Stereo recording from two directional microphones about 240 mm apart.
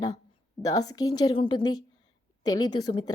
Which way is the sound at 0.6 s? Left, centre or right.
Centre.